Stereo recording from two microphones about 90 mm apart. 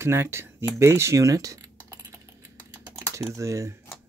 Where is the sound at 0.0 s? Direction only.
30° right (ahead or behind).